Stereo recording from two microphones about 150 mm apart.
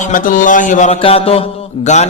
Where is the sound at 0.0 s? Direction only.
65° left (ahead or behind).